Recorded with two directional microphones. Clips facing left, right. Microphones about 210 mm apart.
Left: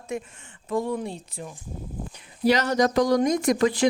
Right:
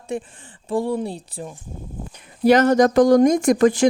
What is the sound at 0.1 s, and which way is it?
A woman's voice, 30° right (ahead or behind).